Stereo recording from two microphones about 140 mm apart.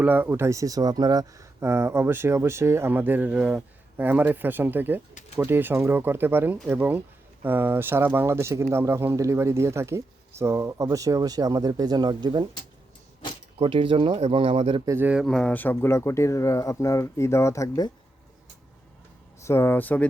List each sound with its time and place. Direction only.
0.0 s speech: 15° right (ahead or behind); by 12.5 s 30° right (ahead or behind)
13.6 s speech: 40° right (ahead or behind)
14.8 s speech: 15° right (ahead or behind)
15.3 s speech: 5° left (ahead or behind); by 17.9 s 25° left (ahead or behind)
19.4 s speech: 20° left (ahead or behind)